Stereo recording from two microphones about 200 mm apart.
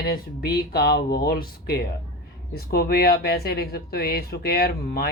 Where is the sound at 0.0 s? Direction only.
50° left (ahead or behind).